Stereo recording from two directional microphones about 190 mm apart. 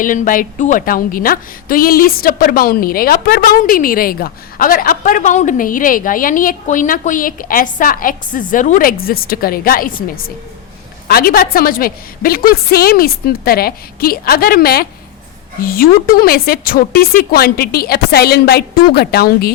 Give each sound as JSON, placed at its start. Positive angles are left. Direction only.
{"t": 0.0, "sound": "a woman's voice", "side_deg": 45}